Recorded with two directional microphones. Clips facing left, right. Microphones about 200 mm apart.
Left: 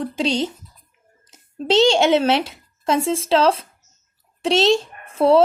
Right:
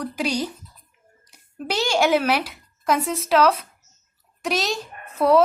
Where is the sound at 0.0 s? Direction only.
25° left (ahead or behind).